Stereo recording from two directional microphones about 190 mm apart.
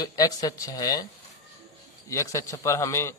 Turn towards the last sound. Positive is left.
turn(degrees=15)  # may be behind; listen again after turning